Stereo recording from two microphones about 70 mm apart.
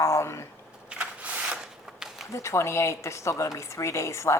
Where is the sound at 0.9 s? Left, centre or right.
Centre.